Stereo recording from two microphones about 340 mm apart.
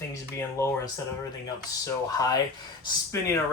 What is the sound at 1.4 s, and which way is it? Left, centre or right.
Speech, centre.